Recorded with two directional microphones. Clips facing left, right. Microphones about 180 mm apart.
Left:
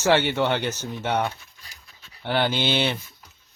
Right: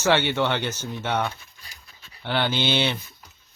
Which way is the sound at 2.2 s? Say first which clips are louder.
Left 1 dB; 40° left (ahead or behind).